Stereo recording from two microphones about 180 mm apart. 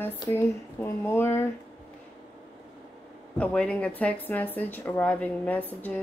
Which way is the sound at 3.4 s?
5° left (ahead or behind).